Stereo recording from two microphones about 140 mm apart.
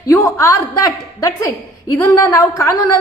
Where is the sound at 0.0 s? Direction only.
25° left (ahead or behind).